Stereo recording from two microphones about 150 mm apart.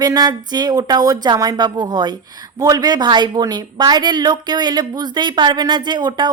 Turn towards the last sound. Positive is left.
turn(degrees=-30)  # may be behind; listen again after turning